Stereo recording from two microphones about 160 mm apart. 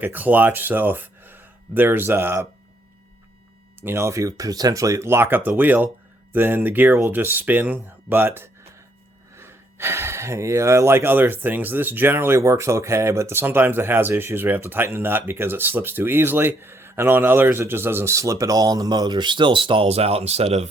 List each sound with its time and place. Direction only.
0.0 s speech: 10° right (ahead or behind)
3.8 s speech: 15° right (ahead or behind); by 20.7 s 40° right (ahead or behind)